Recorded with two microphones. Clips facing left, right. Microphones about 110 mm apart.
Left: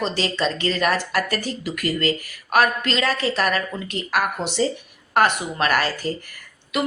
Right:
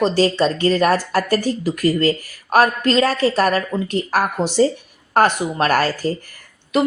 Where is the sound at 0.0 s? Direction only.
40° right (ahead or behind).